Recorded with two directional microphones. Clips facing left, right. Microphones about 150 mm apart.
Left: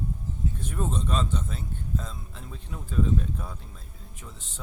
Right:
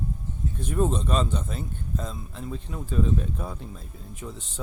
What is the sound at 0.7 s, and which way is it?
Speech, 10° right (ahead or behind).